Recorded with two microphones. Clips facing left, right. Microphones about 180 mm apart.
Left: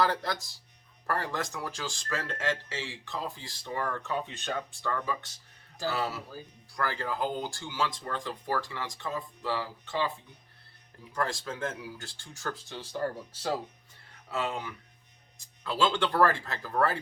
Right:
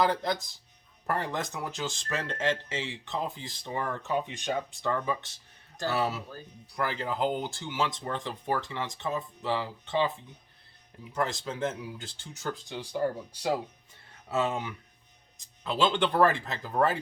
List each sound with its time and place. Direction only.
0.0 s speech: 20° right (ahead or behind)
11.1 s speech: 20° right (ahead or behind)